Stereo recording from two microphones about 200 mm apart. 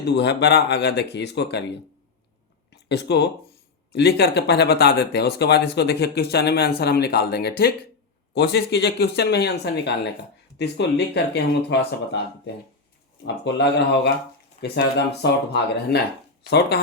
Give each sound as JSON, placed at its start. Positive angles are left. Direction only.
{"t": 0.0, "sound": "speech", "side_deg": 60}
{"t": 2.9, "sound": "speech", "side_deg": 55}
{"t": 13.2, "sound": "speech", "side_deg": 60}